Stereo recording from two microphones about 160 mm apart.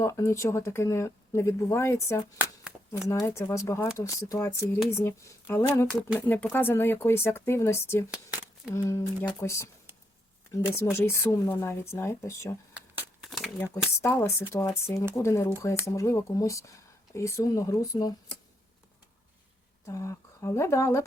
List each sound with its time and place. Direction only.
0.0 s speech: 20° left (ahead or behind)
8.1 s a sound: 5° right (ahead or behind)
8.7 s speech: 20° left (ahead or behind)
10.9 s speech: 15° left (ahead or behind)
12.7 s a sound: 5° right (ahead or behind)
13.9 s speech: 15° left (ahead or behind)
19.8 s speech: 20° left (ahead or behind)